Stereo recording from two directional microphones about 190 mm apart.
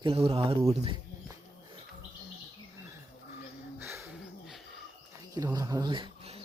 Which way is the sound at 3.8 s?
15° right (ahead or behind).